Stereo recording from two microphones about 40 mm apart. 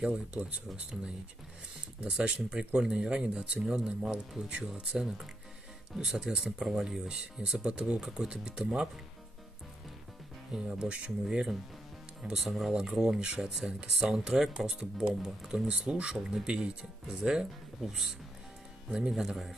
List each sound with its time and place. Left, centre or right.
0.0 s speech: right
2.0 s speech: right
4.5 s speech: right
4.9 s speech: centre
7.1 s speech: centre
10.5 s speech: centre
12.7 s speech: centre